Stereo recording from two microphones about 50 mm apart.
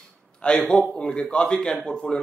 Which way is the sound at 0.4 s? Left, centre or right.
Left.